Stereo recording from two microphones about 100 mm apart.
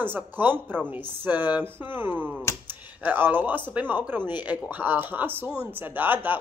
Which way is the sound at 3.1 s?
20° right (ahead or behind).